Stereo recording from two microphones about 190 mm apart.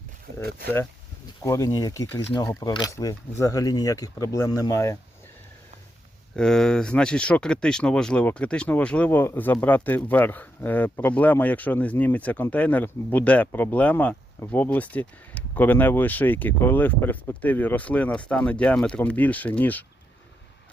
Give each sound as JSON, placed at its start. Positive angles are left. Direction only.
{"t": 1.4, "sound": "speech", "side_deg": 15}
{"t": 6.3, "sound": "speech", "side_deg": 5}